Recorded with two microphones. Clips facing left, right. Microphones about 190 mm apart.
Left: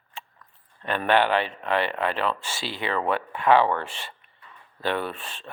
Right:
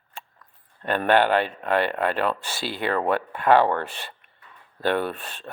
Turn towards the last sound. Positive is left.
turn(degrees=-60)  # may be behind; listen again after turning